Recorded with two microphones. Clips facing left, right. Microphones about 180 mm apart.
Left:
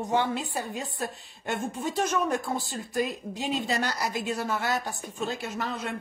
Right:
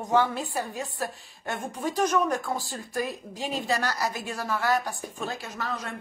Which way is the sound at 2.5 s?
20° left (ahead or behind).